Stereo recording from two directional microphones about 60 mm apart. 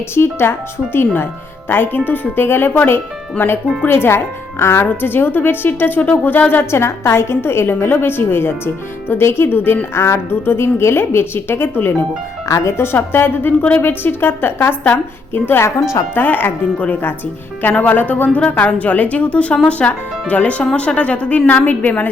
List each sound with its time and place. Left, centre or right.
0.1 s a woman's voice: left
6.7 s a woman's voice: left
12.5 s a woman's voice: left